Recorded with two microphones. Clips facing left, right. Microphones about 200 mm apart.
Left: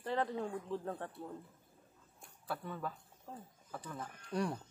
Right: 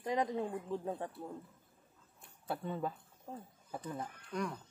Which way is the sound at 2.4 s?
25° right (ahead or behind).